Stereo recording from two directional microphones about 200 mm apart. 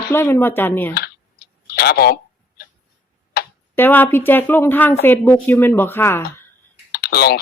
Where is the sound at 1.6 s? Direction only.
50° left (ahead or behind).